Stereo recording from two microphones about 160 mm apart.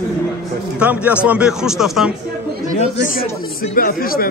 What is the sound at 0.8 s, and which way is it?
A man's voice, 10° right (ahead or behind).